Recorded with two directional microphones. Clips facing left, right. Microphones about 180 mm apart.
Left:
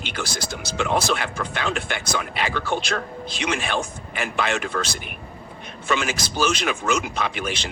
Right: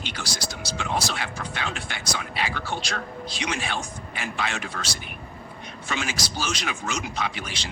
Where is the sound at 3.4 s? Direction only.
60° left (ahead or behind).